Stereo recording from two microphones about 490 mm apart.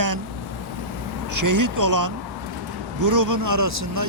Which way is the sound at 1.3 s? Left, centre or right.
Right.